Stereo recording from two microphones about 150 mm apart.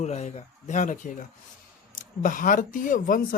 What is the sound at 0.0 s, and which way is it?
Speech, 50° left (ahead or behind).